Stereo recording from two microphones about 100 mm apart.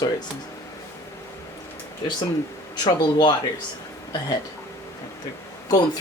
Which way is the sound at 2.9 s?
45° left (ahead or behind).